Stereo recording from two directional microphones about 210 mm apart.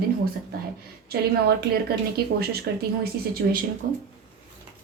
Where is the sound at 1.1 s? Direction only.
50° right (ahead or behind).